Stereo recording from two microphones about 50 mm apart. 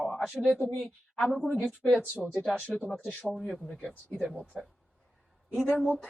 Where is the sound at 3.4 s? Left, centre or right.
Left.